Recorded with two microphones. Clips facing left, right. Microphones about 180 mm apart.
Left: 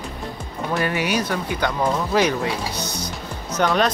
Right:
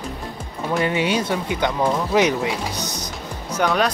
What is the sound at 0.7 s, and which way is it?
Speech, 20° right (ahead or behind).